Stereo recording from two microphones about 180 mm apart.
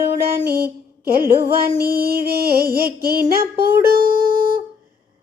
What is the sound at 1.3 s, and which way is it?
Music, 60° right (ahead or behind).